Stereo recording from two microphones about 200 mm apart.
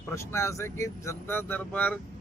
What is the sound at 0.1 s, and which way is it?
Speech, 15° left (ahead or behind).